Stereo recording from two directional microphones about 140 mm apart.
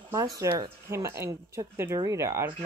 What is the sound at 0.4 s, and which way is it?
Speech, 20° right (ahead or behind).